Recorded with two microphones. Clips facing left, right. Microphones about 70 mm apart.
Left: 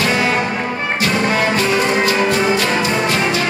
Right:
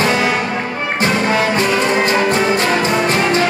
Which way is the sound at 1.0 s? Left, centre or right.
Right.